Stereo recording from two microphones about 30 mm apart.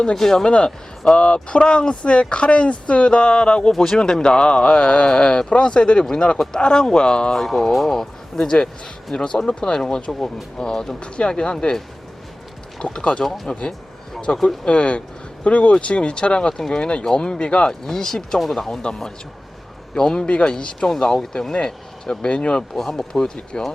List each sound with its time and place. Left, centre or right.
0.0 s speech: centre
0.4 s speech: left
1.6 s speech: left
3.7 s speech: centre
7.3 s speech: centre
7.9 s speech: centre; by 11.5 s left
12.8 s speech: left
13.5 s speech: left
17.7 s speech: centre
20.0 s speech: left
21.5 s speech: left
22.7 s speech: centre